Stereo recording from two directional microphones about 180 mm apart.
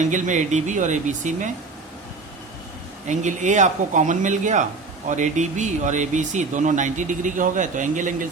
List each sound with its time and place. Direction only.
0.0 s speech: 45° right (ahead or behind)
3.1 s speech: 40° right (ahead or behind)